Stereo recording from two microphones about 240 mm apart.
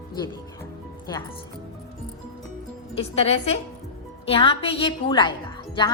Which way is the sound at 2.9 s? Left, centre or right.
Left.